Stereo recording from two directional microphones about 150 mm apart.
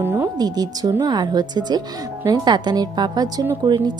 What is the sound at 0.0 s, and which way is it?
Music, 15° right (ahead or behind).